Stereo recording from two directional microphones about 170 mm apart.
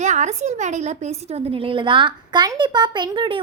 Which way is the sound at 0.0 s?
45° right (ahead or behind).